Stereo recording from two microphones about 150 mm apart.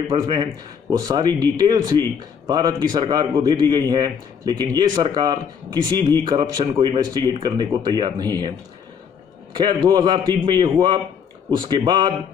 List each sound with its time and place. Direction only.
0.1 s a man's voice: 35° right (ahead or behind)
9.6 s speech: 30° right (ahead or behind)